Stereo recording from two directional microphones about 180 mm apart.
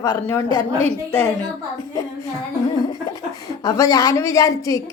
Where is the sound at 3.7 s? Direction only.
20° left (ahead or behind).